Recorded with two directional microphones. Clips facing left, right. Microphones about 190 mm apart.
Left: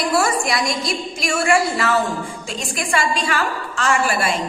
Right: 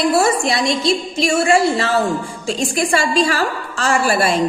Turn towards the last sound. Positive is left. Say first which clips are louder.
# right 3 dB
turn(degrees=-35)  # may be behind; listen again after turning